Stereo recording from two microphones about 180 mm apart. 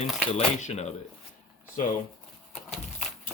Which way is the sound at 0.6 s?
40° left (ahead or behind).